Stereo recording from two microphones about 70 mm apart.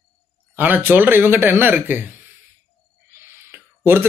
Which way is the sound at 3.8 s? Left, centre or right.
Right.